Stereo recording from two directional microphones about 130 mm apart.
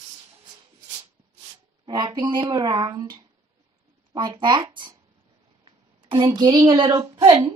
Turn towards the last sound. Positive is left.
turn(degrees=-25)  # may be behind; listen again after turning